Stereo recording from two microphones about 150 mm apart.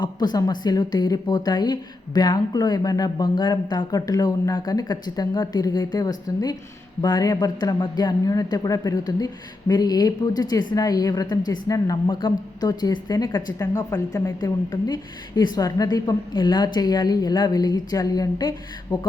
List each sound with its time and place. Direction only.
0.0 s a man's voice: 30° left (ahead or behind)